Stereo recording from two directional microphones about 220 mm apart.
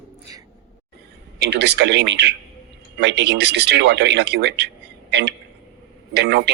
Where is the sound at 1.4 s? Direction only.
50° right (ahead or behind).